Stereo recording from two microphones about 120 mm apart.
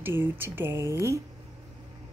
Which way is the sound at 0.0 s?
20° right (ahead or behind).